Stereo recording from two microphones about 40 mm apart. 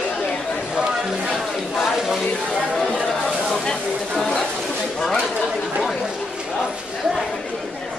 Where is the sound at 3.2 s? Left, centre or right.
Centre.